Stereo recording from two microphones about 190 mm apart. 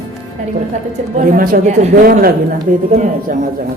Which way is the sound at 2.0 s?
50° right (ahead or behind).